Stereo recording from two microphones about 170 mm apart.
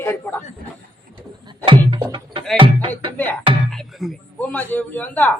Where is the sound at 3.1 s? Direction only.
10° left (ahead or behind).